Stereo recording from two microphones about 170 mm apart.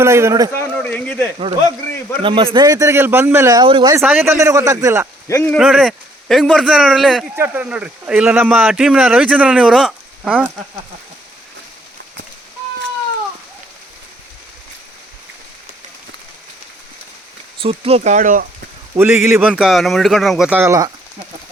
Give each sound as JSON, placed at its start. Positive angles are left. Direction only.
{"t": 0.0, "sound": "speech", "side_deg": -15}
{"t": 0.6, "sound": "speech", "side_deg": 10}
{"t": 2.2, "sound": "a man's voice", "side_deg": -30}
{"t": 3.6, "sound": "a man's voice", "side_deg": -30}
{"t": 3.9, "sound": "speech", "side_deg": -10}
{"t": 5.3, "sound": "speech", "side_deg": 10}
{"t": 5.5, "sound": "a man's voice", "side_deg": 0}
{"t": 7.3, "sound": "speech", "side_deg": -10}
{"t": 17.6, "sound": "speech", "side_deg": -35}
{"t": 18.9, "sound": "a man's voice", "side_deg": -10}